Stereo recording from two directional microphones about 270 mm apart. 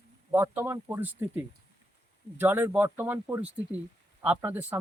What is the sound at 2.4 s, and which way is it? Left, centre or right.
Speech, centre.